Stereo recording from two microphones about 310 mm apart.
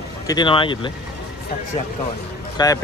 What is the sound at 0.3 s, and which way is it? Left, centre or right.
Speech, centre.